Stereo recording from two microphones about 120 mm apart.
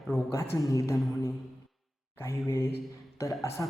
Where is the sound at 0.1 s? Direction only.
20° left (ahead or behind).